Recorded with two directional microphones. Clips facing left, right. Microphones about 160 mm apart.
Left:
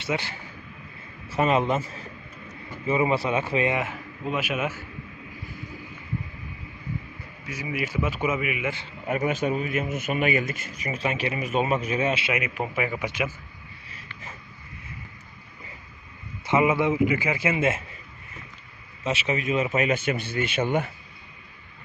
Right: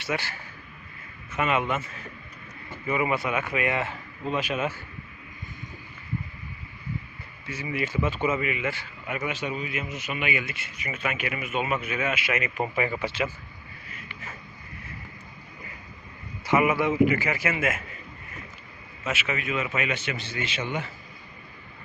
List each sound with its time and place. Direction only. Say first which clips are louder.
0.0 s speech: left 2 dB; 20° left (ahead or behind)
1.3 s speech: left 4 dB; 35° left (ahead or behind)
3.8 s a man's voice: left 1 dB; 10° left (ahead or behind)
7.4 s a man's voice: even; 10° left (ahead or behind)
9.0 s speech: left 6 dB; 40° left (ahead or behind)
12.5 s a man's voice: right 1 dB; 5° left (ahead or behind)
16.5 s speech: left 1 dB; 20° left (ahead or behind)
19.0 s speech: left 4 dB; 35° left (ahead or behind); by 20.8 s 50° left (ahead or behind)